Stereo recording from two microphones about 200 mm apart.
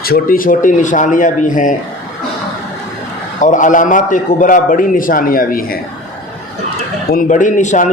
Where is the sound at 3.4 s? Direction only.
40° left (ahead or behind).